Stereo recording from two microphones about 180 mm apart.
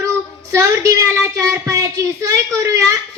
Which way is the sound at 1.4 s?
20° right (ahead or behind).